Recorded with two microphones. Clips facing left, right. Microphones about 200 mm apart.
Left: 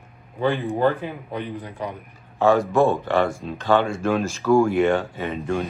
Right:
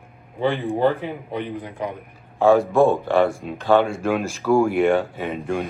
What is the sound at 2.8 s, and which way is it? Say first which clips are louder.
A man's voice: right 2 dB; centre (ahead or behind).